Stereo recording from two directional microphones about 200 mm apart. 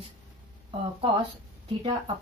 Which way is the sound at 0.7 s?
25° right (ahead or behind).